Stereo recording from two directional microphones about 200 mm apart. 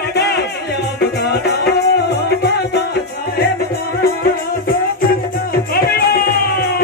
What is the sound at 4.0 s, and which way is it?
Music, 50° left (ahead or behind).